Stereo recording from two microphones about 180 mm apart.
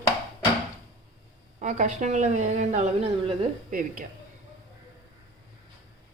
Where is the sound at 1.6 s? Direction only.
45° right (ahead or behind).